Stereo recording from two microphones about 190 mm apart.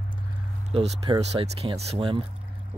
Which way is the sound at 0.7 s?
30° right (ahead or behind).